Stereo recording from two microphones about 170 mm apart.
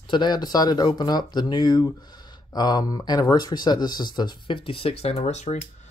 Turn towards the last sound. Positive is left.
turn(degrees=40)  # may be behind; listen again after turning